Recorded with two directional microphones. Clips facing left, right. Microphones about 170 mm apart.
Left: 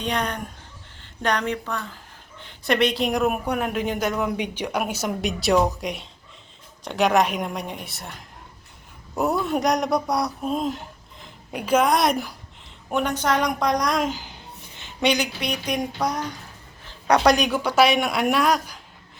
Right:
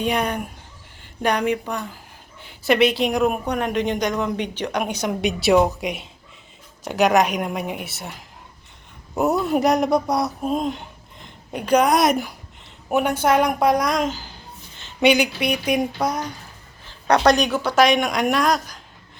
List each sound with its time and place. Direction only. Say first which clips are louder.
0.0 s a woman's voice: right 4 dB; 10° right (ahead or behind)
9.4 s a woman's voice: right 4 dB; centre (ahead or behind)
14.1 s a woman's voice: even; 15° left (ahead or behind)
15.0 s a woman's voice: right 5 dB; 10° right (ahead or behind)
17.1 s speech: right 1 dB; 10° left (ahead or behind)